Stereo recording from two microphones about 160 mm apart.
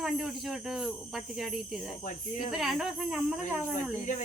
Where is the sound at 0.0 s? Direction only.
Centre (ahead or behind).